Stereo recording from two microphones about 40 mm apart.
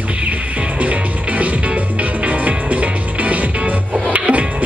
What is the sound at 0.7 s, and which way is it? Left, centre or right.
Music, right.